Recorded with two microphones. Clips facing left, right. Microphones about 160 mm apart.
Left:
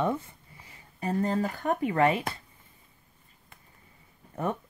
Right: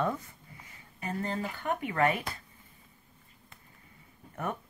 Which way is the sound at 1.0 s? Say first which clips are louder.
Left 6 dB; 40° left (ahead or behind).